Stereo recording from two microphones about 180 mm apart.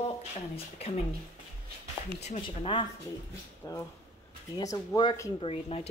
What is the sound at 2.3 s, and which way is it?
Speech, 30° left (ahead or behind).